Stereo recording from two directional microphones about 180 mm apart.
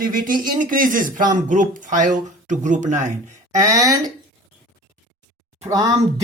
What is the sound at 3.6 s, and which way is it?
Speech, 20° right (ahead or behind).